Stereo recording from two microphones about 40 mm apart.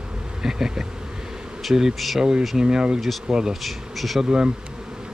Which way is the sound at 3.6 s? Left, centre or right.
Centre.